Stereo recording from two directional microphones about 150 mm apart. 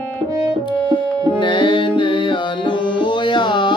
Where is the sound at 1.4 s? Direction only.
30° left (ahead or behind).